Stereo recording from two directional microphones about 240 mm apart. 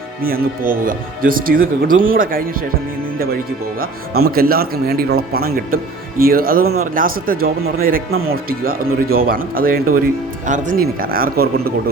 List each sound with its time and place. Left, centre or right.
0.2 s speech: right
4.2 s speech: right